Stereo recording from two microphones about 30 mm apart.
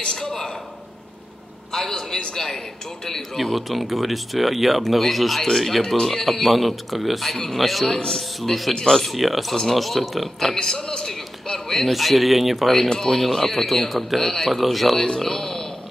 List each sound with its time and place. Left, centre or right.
0.0 s a sound: left
1.7 s speech: centre
8.5 s speech: centre
10.5 s speech: centre
11.1 s a sound: centre
11.9 s speech: centre
13.0 s speech: centre
15.1 s a man's voice: centre